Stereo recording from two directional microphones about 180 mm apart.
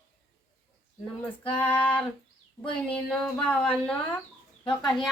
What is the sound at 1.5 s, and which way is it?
Female singing, 5° left (ahead or behind).